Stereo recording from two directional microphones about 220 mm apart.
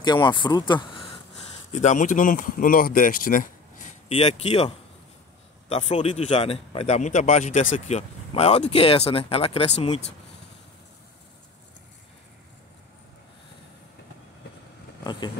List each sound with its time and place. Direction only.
0.0 s speech: 20° left (ahead or behind)
1.7 s speech: 30° left (ahead or behind)
4.1 s speech: 25° left (ahead or behind)
15.0 s vehicle: 20° left (ahead or behind)